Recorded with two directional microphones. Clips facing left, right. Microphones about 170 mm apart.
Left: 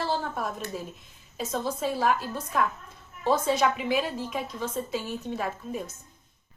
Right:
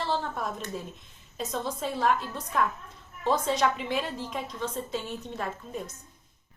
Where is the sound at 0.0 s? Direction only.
5° left (ahead or behind).